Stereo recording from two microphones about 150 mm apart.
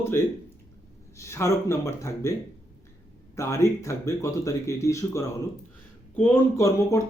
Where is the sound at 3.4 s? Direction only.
20° left (ahead or behind).